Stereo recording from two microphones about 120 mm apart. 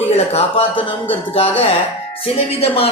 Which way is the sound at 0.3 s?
50° left (ahead or behind).